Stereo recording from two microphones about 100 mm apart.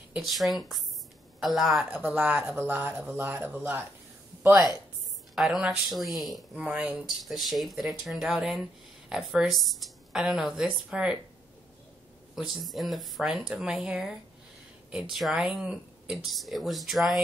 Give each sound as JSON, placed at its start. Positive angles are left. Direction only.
{"t": 0.2, "sound": "speech", "side_deg": 0}
{"t": 5.3, "sound": "speech", "side_deg": -5}
{"t": 6.5, "sound": "speech", "side_deg": -15}
{"t": 7.2, "sound": "speech", "side_deg": 0}
{"t": 12.4, "sound": "speech", "side_deg": 0}